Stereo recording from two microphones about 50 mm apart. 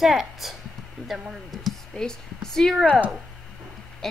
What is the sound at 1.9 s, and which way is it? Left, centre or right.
Speech, centre.